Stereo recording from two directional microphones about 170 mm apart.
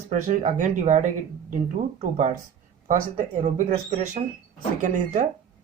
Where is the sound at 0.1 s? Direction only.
45° right (ahead or behind).